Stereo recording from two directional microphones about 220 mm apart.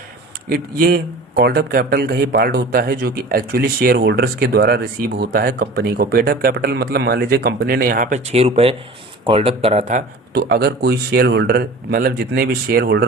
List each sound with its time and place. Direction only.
0.5 s speech: 40° right (ahead or behind)
10.3 s speech: 45° right (ahead or behind)